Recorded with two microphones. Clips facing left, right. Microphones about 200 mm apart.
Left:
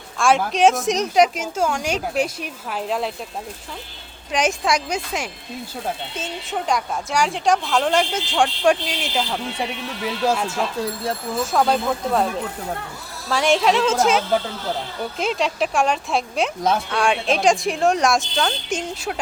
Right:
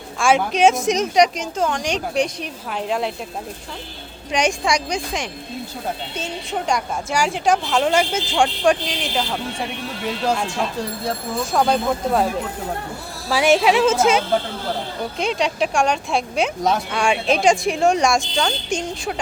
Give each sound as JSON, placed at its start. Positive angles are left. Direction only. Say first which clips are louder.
{"t": 0.2, "sound": "a woman's voice", "louder": "right 1 dB", "side_deg": 0}
{"t": 4.3, "sound": "a woman's voice", "louder": "right 1 dB", "side_deg": 0}
{"t": 10.2, "sound": "a woman's voice", "louder": "left 1 dB", "side_deg": 5}
{"t": 13.3, "sound": "a woman's voice", "louder": "right 2 dB", "side_deg": -5}